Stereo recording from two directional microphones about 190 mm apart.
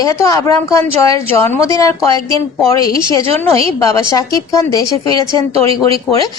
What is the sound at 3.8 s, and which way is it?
A woman's voice, 15° left (ahead or behind).